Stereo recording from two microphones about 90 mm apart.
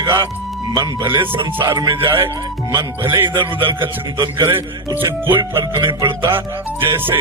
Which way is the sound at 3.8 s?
60° right (ahead or behind).